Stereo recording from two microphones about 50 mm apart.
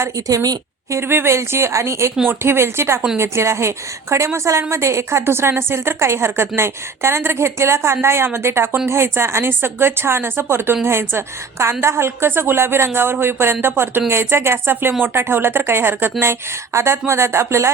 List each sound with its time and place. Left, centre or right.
0.9 s a woman's voice: right
10.8 s a woman's voice: right
16.7 s speech: right